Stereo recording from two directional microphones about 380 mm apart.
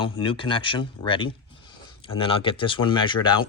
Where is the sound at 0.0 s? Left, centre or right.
Centre.